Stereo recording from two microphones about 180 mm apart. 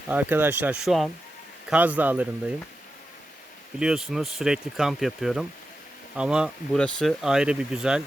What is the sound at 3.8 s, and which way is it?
Speech, 5° right (ahead or behind).